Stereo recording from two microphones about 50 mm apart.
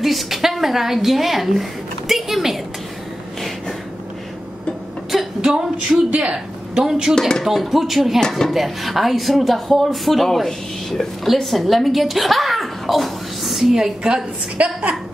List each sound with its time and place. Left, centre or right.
0.0 s a sound: centre
5.4 s a sound: centre
6.0 s a woman's voice: right
6.3 s speech: centre
7.2 s speech: centre
7.4 s speech: centre
8.2 s speech: centre
8.5 s a woman's voice: centre
14.6 s a woman's voice: right